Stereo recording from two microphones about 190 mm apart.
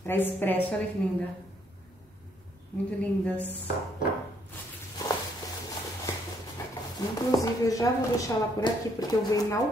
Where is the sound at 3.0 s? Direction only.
5° left (ahead or behind).